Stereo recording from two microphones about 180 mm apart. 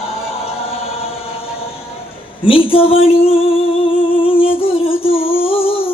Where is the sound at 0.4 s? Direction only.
35° left (ahead or behind).